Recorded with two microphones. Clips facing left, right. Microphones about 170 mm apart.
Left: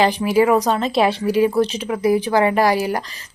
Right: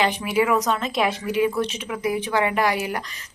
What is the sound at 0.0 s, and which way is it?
Speech, 35° left (ahead or behind).